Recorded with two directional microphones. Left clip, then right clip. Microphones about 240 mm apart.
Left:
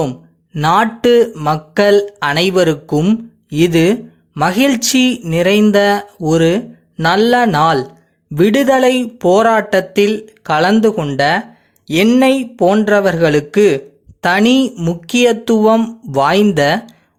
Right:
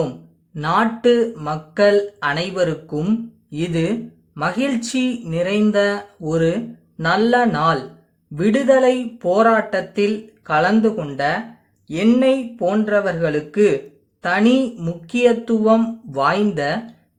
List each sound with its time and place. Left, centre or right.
0.5 s a man's voice: left